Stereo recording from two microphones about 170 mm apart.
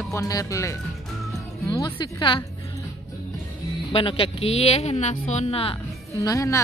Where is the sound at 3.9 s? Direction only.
30° left (ahead or behind).